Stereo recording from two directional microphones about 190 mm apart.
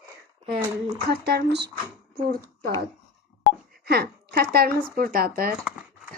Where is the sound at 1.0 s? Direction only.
55° right (ahead or behind).